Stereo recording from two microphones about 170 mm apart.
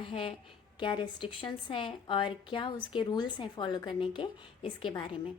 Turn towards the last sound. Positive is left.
turn(degrees=30)  # may be behind; listen again after turning